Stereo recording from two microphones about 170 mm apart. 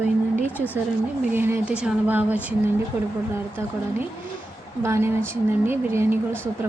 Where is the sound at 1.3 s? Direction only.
15° right (ahead or behind).